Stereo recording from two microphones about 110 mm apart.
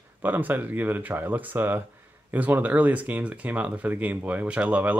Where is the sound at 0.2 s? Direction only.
15° right (ahead or behind).